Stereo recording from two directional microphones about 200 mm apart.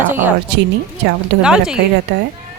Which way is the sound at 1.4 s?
5° right (ahead or behind).